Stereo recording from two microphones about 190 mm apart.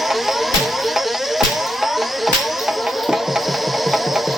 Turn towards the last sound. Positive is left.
turn(degrees=0)  # may be behind; listen again after turning